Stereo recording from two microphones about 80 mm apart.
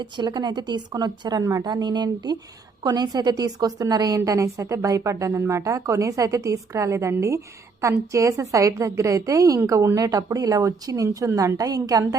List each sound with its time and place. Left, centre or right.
0.0 s speech: right
4.3 s a woman's voice: right